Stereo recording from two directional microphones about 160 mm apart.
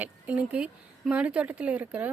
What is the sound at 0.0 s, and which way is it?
A woman's voice, 10° right (ahead or behind).